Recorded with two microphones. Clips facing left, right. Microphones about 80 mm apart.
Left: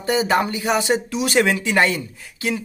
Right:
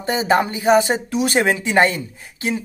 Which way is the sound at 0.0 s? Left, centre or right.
Right.